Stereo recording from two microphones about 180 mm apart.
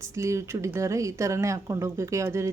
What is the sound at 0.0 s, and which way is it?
Speech, 15° right (ahead or behind).